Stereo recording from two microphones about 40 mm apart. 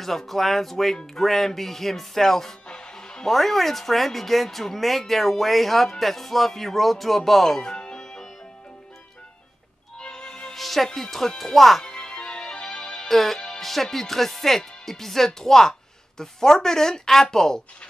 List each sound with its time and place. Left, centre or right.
0.0 s speech: centre
2.7 s music: centre
3.3 s speech: centre
7.7 s music: centre
9.9 s music: centre
10.5 s music: centre
11.0 s speech: centre
11.8 s music: centre
13.1 s speech: centre